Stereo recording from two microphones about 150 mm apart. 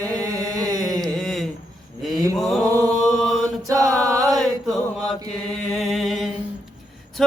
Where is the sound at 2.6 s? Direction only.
25° right (ahead or behind).